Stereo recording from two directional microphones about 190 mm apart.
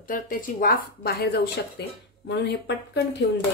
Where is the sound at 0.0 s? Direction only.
45° left (ahead or behind); by 3.3 s 60° left (ahead or behind).